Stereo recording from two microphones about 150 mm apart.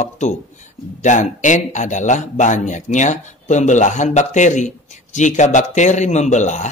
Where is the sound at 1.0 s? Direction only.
55° left (ahead or behind).